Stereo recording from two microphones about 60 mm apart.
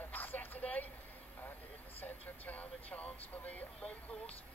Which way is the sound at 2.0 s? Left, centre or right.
Left.